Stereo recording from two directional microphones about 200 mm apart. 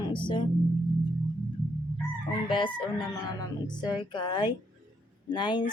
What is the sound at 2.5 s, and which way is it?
Speech, 25° left (ahead or behind).